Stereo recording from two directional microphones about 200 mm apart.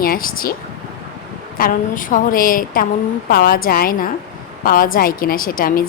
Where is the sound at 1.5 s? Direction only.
45° left (ahead or behind).